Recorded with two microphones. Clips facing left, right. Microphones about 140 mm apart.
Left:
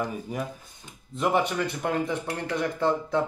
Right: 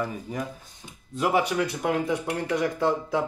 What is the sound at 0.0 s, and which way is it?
Speech, 5° left (ahead or behind).